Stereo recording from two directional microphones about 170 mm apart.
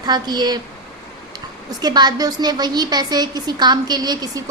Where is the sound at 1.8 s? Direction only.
25° right (ahead or behind).